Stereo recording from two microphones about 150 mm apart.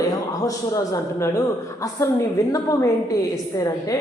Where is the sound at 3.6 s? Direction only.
25° left (ahead or behind).